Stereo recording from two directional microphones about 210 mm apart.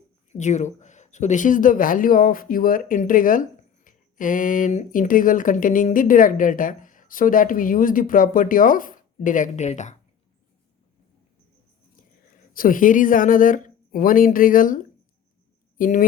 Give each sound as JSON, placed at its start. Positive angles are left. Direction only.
{"t": 0.3, "sound": "speech", "side_deg": 35}
{"t": 11.9, "sound": "speech", "side_deg": 40}